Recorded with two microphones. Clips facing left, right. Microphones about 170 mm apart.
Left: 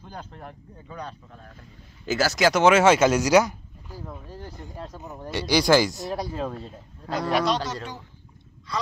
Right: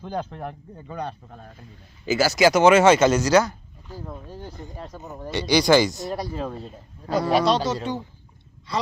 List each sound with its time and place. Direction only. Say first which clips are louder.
0.0 s speech: right 10 dB; 85° right; by 1.5 s 60° right (ahead or behind)
2.0 s speech: right 3 dB; centre (ahead or behind)
4.3 s speech: right 2 dB; 20° right (ahead or behind)
5.3 s speech: right 2 dB; 5° left (ahead or behind)
7.3 s speech: right 3 dB; 30° right (ahead or behind)